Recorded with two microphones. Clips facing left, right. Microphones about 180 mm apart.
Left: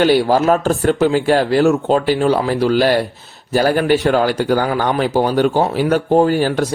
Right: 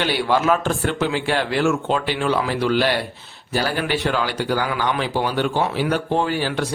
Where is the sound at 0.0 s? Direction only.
40° left (ahead or behind).